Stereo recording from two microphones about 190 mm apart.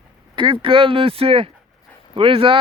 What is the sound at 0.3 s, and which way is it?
Speech, 25° right (ahead or behind).